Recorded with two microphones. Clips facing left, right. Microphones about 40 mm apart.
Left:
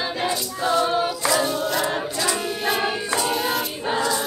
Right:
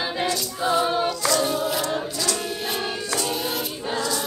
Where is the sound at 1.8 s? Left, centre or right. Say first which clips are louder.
Left 2 dB; left.